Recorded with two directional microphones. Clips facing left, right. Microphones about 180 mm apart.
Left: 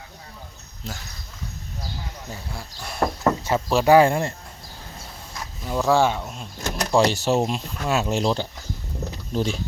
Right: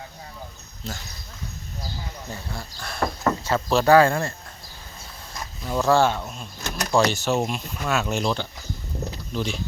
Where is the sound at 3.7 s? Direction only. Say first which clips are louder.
Left 1 dB; 10° left (ahead or behind).